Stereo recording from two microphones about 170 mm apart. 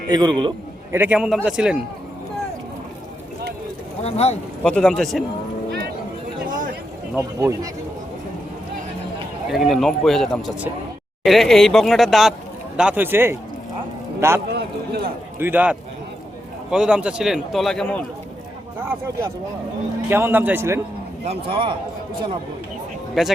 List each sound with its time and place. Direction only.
0.1 s a man's voice: 25° right (ahead or behind)
0.9 s a man's voice: 10° right (ahead or behind)
4.0 s speech: 40° left (ahead or behind)
4.6 s a man's voice: 5° left (ahead or behind)
7.2 s a man's voice: 15° right (ahead or behind)
9.5 s a man's voice: centre (ahead or behind)
14.5 s a sound: 70° right (ahead or behind)
15.4 s a man's voice: 10° right (ahead or behind); by 18.0 s 5° left (ahead or behind)
18.8 s a man's voice: 15° right (ahead or behind)
21.2 s speech: 30° right (ahead or behind)
23.2 s a man's voice: centre (ahead or behind)